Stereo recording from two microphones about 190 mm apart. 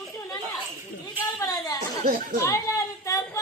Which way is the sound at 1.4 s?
20° left (ahead or behind).